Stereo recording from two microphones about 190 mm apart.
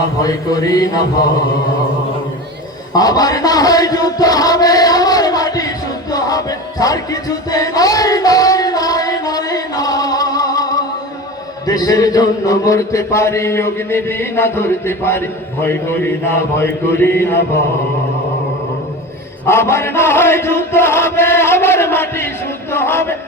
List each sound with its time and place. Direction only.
0.2 s speech: 20° left (ahead or behind)
2.9 s chant: 20° left (ahead or behind)
11.6 s mantra: 20° left (ahead or behind)
19.5 s mantra: 15° left (ahead or behind)
22.7 s speech: 10° left (ahead or behind)